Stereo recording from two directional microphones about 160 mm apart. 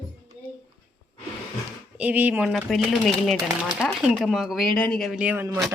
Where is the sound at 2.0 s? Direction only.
10° right (ahead or behind).